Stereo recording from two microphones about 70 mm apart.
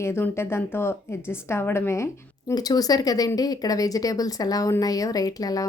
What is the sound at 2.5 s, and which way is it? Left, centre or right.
Speech, left.